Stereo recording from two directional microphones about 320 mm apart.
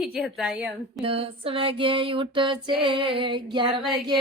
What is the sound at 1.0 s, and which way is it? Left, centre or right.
Female singing, centre.